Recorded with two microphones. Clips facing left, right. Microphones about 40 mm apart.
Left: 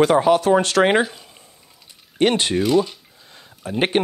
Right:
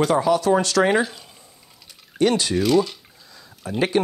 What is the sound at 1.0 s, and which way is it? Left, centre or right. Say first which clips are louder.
Speech: left 1 dB; centre.